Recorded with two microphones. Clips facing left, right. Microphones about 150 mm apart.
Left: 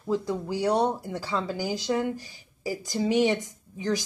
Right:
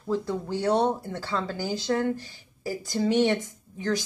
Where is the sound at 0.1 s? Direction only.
10° left (ahead or behind).